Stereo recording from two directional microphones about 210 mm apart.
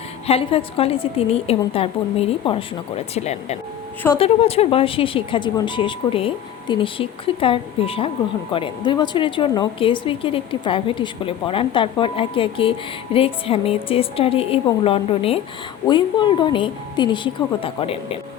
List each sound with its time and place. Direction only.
0.3 s speech: 25° left (ahead or behind)